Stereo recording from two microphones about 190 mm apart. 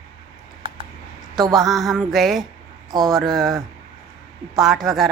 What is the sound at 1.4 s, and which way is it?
A woman's voice, centre (ahead or behind).